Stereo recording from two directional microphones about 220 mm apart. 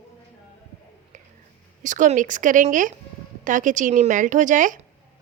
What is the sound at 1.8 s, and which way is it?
Speech, 35° right (ahead or behind).